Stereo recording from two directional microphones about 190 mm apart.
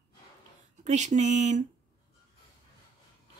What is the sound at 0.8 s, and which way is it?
Speech, 40° right (ahead or behind).